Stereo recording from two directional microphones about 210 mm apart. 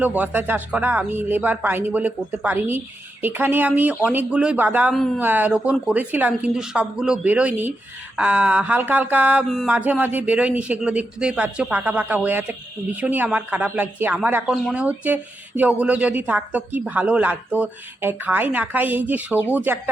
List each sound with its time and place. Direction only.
0.0 s a woman's voice: 10° right (ahead or behind)